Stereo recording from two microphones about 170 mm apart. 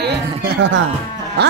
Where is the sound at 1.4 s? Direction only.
90° right.